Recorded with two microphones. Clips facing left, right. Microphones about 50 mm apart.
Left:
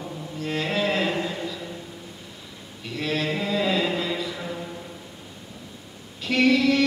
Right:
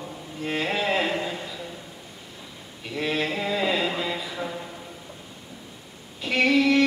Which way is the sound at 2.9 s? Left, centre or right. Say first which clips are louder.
Even; centre.